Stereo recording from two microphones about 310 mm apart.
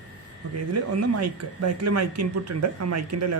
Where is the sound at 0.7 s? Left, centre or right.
Right.